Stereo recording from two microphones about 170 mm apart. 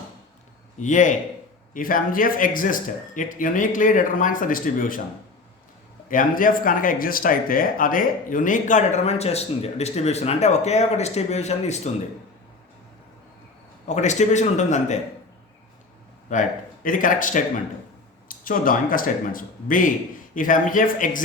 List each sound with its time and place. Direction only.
0.8 s speech: 45° left (ahead or behind)
6.1 s speech: 55° left (ahead or behind)
13.8 s speech: 45° left (ahead or behind)
16.3 s speech: 50° left (ahead or behind)